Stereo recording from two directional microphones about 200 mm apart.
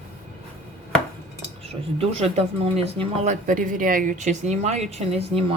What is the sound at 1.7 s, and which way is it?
Speech, 30° right (ahead or behind).